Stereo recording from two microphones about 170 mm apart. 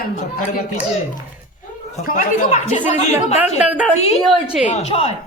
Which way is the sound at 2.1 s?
50° left (ahead or behind).